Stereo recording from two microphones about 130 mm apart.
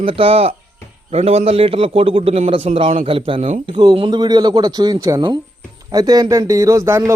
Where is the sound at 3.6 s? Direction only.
30° right (ahead or behind).